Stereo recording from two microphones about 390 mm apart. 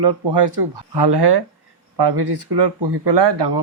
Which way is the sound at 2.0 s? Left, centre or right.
Right.